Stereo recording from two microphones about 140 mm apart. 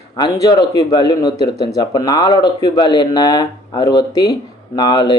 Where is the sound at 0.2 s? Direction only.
25° left (ahead or behind).